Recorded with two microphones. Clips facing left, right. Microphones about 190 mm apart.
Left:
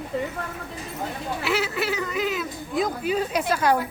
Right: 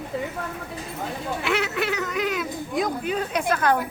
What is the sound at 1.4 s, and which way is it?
Speech, 5° left (ahead or behind).